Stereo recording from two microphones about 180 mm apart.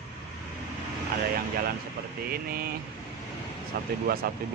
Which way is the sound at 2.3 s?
55° right (ahead or behind).